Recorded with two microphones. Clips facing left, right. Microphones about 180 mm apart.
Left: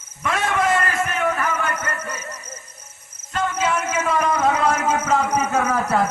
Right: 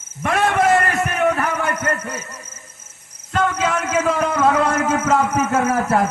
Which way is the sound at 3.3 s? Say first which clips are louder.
Right 2 dB; 65° right (ahead or behind).